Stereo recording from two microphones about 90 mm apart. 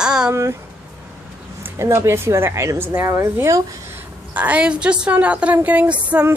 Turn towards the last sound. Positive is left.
turn(degrees=-15)  # may be behind; listen again after turning